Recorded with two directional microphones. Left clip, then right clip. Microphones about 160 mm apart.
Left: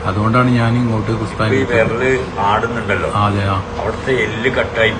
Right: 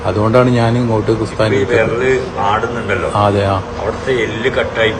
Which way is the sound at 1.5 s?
25° right (ahead or behind).